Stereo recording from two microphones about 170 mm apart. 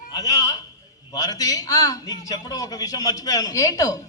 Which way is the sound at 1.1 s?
20° left (ahead or behind).